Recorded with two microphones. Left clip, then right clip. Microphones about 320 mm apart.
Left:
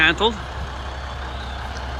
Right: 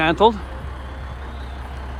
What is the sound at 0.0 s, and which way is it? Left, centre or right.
Speech, centre.